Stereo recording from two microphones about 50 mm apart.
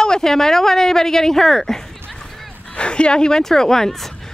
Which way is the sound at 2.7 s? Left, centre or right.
Centre.